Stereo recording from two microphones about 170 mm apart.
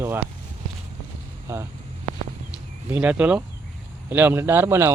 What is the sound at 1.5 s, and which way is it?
Speech, 15° right (ahead or behind).